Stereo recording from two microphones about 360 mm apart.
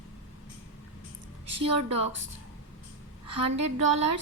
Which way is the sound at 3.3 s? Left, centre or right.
Centre.